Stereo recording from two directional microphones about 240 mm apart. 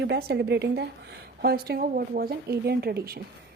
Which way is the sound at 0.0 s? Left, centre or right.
Right.